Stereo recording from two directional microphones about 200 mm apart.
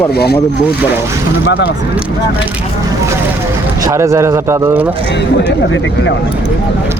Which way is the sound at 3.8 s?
15° right (ahead or behind).